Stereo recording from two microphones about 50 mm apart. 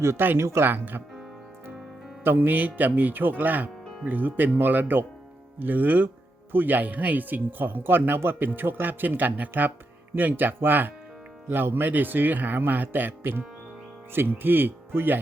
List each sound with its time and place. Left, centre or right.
0.3 s speech: right
0.7 s speech: right
2.2 s speech: right